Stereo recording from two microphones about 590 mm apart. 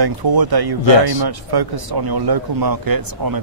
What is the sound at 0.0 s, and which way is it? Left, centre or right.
Speech, right.